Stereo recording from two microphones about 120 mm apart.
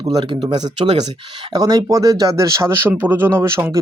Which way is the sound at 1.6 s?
30° right (ahead or behind).